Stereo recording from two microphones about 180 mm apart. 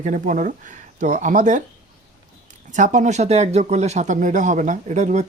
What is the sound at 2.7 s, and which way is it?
Speech, 45° right (ahead or behind).